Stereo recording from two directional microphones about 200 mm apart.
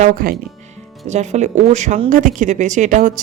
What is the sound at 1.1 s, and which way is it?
Speech, 35° right (ahead or behind).